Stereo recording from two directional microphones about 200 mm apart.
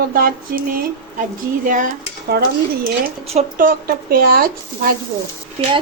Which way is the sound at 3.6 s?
45° right (ahead or behind).